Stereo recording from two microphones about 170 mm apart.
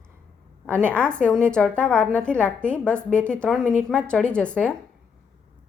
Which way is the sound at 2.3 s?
15° right (ahead or behind).